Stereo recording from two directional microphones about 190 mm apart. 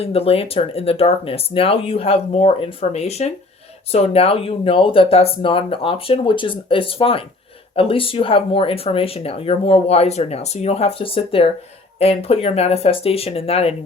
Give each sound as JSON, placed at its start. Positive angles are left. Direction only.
{"t": 0.0, "sound": "speech", "side_deg": 30}